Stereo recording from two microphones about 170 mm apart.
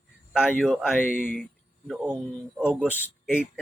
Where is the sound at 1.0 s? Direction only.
55° left (ahead or behind).